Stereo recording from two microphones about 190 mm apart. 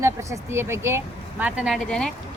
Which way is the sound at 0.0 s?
15° right (ahead or behind).